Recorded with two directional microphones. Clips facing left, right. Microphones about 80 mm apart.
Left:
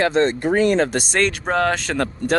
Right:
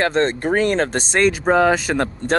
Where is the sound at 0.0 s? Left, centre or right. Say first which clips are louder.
Left 1 dB; right.